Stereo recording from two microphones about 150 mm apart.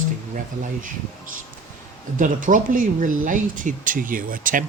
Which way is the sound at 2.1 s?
60° right (ahead or behind).